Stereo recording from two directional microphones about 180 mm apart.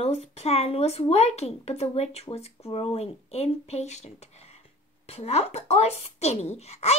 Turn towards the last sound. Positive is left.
turn(degrees=35)  # may be behind; listen again after turning